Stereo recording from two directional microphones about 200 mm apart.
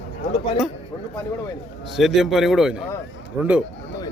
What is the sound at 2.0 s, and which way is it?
Speech, centre (ahead or behind).